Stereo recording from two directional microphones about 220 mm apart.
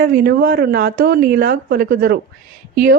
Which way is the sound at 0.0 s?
45° right (ahead or behind).